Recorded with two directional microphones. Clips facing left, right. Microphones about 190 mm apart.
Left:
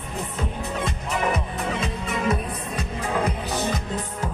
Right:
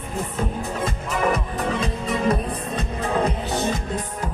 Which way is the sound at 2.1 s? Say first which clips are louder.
Right 3 dB; 35° right (ahead or behind).